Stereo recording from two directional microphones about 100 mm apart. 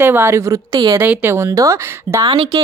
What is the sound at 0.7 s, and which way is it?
Speech, 60° right (ahead or behind).